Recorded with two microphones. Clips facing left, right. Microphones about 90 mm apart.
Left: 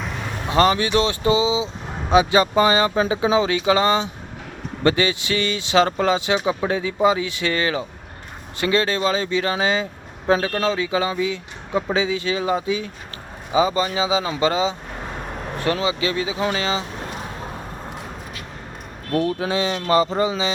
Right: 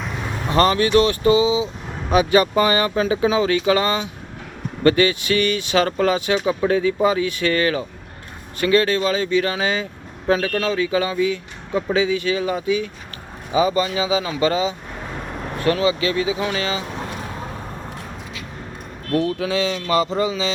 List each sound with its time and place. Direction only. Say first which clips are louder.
0.4 s speech: right 1 dB; 15° left (ahead or behind)
19.1 s speech: right 1 dB; 30° left (ahead or behind)